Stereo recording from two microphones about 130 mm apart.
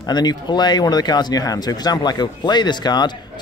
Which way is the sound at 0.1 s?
35° left (ahead or behind).